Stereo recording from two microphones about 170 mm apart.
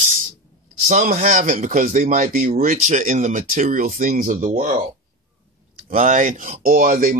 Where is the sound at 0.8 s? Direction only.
40° right (ahead or behind).